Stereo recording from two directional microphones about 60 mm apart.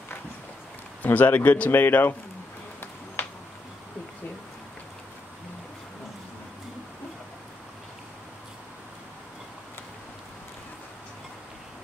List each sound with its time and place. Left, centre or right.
1.0 s speech: left